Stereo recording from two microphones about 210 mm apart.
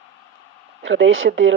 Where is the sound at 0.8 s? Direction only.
65° right (ahead or behind).